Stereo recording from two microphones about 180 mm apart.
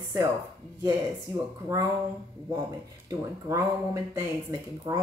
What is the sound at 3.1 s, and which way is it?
Speech, 20° right (ahead or behind).